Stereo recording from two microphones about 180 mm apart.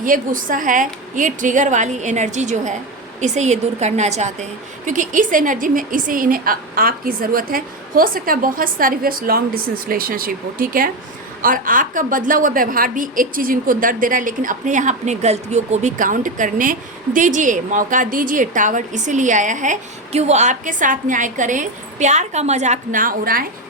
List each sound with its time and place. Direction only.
0.0 s a woman's voice: 50° right (ahead or behind)